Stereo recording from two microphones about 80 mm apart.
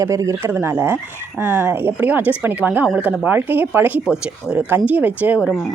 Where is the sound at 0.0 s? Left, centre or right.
Right.